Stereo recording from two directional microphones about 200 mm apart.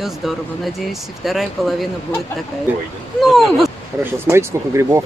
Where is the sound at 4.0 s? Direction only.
10° right (ahead or behind).